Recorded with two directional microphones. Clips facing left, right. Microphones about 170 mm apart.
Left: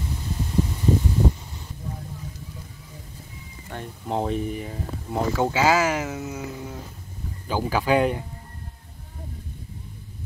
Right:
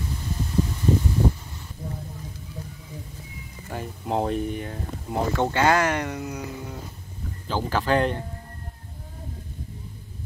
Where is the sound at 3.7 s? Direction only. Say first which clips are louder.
Right 1 dB; centre (ahead or behind).